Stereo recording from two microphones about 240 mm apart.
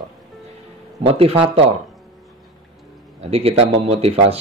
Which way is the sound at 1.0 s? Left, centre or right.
Right.